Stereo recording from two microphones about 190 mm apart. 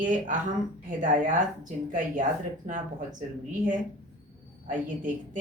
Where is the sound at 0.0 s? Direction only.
45° right (ahead or behind).